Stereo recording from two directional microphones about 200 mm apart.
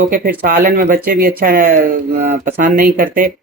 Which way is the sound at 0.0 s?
45° right (ahead or behind).